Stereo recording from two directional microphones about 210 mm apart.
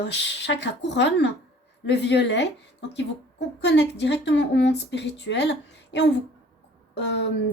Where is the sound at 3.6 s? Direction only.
55° left (ahead or behind).